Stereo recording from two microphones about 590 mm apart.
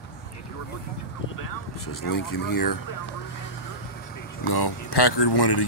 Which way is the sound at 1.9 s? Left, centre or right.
Left.